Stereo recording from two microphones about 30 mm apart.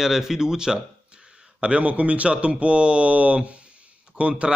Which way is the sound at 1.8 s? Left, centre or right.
Right.